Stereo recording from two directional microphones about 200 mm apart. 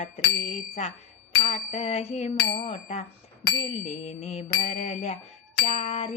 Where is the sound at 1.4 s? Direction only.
30° left (ahead or behind).